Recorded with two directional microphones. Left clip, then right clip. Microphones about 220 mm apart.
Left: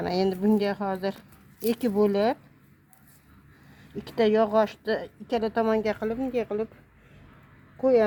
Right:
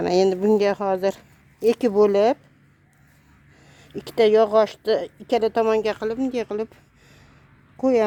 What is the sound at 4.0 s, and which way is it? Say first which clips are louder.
Speech: right 6 dB; 55° right (ahead or behind).